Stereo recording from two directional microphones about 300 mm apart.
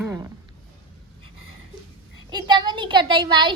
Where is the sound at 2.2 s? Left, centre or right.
Centre.